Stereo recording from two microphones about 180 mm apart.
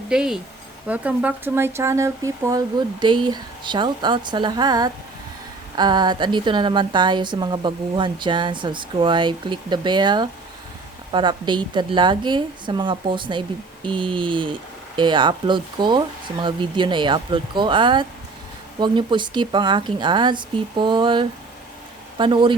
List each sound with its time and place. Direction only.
0.1 s a woman's voice: 5° right (ahead or behind); by 22.5 s 25° right (ahead or behind)